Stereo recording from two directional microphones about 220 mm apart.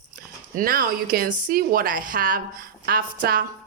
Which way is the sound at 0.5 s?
40° right (ahead or behind).